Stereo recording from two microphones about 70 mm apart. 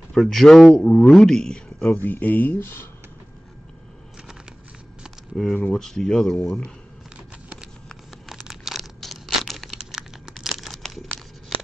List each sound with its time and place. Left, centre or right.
0.1 s speech: centre
0.8 s speech: centre
1.9 s speech: left
5.3 s speech: centre
8.3 s tearing: centre